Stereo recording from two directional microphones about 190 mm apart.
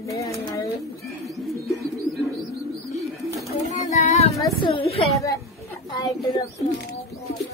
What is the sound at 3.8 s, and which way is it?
Child singing, 40° left (ahead or behind).